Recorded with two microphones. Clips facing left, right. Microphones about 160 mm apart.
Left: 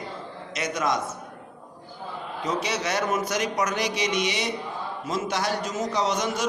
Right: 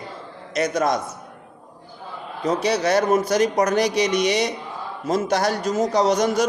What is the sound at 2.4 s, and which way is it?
A man's voice, 35° right (ahead or behind).